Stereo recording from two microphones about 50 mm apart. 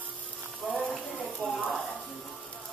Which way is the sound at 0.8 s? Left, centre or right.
Left.